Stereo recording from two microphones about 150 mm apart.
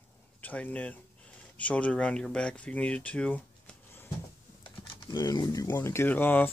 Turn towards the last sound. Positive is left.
turn(degrees=10)  # may be behind; listen again after turning